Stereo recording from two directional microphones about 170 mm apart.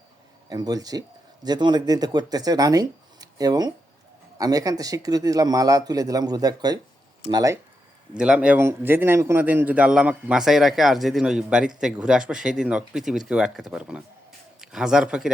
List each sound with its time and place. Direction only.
0.5 s speech: 20° right (ahead or behind)
8.1 s speech: 5° right (ahead or behind)